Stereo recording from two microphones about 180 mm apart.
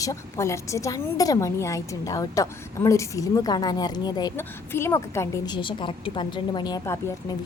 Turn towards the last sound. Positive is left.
turn(degrees=15)  # may be behind; listen again after turning